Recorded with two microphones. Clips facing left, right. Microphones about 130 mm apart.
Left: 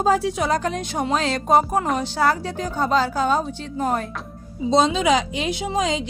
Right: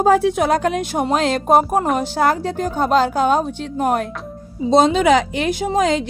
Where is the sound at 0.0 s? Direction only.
55° right (ahead or behind).